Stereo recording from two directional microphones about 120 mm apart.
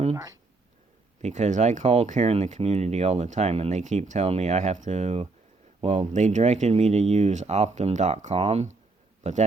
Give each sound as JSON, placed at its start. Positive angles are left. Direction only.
{"t": 1.2, "sound": "speech", "side_deg": -80}
{"t": 4.3, "sound": "speech", "side_deg": -65}
{"t": 9.2, "sound": "a man's voice", "side_deg": -80}